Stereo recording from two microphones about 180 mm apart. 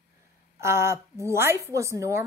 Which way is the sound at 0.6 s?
15° right (ahead or behind).